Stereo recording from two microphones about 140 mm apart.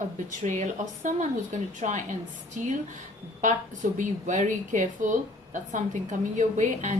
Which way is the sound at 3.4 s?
65° right (ahead or behind).